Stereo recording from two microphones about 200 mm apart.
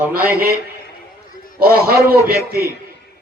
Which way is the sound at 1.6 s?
50° right (ahead or behind).